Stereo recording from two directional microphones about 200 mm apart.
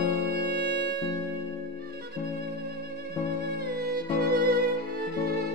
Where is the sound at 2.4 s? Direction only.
50° right (ahead or behind).